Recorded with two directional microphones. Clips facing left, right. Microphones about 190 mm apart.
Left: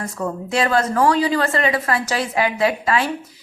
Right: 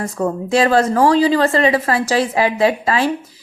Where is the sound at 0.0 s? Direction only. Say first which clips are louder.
Right 5 dB; 35° right (ahead or behind).